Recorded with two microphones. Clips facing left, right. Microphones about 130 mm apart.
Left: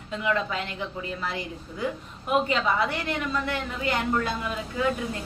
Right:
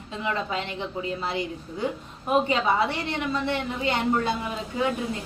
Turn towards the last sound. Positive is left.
turn(degrees=-20)  # may be behind; listen again after turning